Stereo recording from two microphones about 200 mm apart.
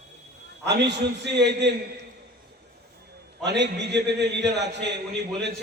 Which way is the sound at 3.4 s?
60° right (ahead or behind).